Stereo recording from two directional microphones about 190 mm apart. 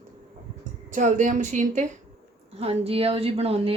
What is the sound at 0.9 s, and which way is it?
A woman's voice, 40° right (ahead or behind).